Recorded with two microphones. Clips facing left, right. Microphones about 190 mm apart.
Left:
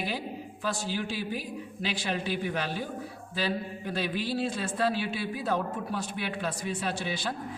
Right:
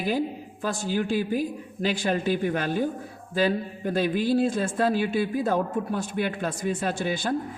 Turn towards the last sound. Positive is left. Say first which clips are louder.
# right 6 dB
turn(degrees=-50)  # may be behind; listen again after turning